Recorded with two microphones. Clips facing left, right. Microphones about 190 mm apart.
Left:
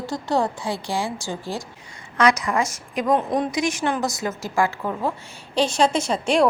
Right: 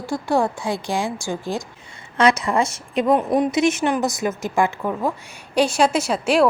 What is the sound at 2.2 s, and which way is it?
Speech, 25° right (ahead or behind).